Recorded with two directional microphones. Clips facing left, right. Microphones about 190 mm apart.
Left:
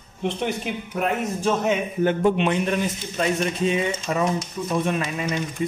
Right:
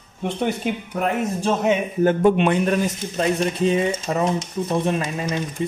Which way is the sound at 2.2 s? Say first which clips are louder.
Right 3 dB; 50° right (ahead or behind).